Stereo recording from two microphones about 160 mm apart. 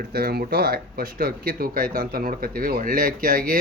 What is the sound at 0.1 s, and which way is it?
Speech, 75° right (ahead or behind).